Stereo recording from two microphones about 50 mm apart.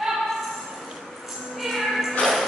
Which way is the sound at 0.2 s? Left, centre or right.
Centre.